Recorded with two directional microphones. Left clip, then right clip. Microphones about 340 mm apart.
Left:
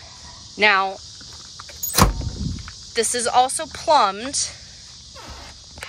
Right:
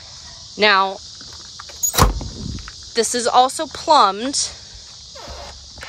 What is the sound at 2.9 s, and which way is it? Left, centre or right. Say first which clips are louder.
Speech: right 3 dB; centre.